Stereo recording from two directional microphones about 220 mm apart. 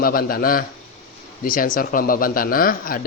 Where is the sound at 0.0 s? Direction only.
40° left (ahead or behind).